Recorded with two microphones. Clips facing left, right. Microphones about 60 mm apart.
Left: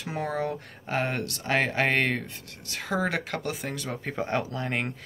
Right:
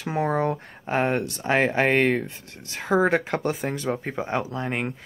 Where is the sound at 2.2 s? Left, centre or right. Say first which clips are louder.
Right 2 dB; right.